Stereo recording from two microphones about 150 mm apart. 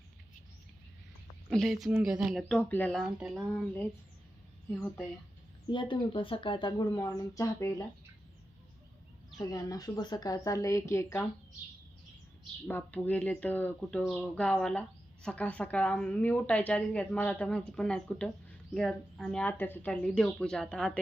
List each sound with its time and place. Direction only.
1.5 s speech: centre (ahead or behind)
3.2 s speech: centre (ahead or behind)
5.7 s speech: 35° left (ahead or behind)
9.4 s speech: 25° left (ahead or behind)
12.6 s speech: 10° left (ahead or behind)